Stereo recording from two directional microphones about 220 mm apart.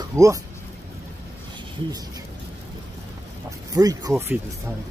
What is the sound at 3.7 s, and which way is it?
Speech, 15° right (ahead or behind).